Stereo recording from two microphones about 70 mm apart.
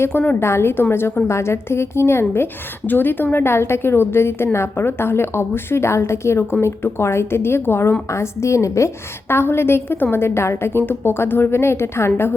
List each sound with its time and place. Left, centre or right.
0.1 s a woman's voice: left
0.3 s a woman's voice: left
9.3 s a woman's voice: left